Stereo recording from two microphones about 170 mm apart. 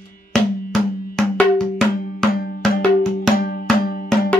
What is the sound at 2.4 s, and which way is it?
Music, 60° left (ahead or behind).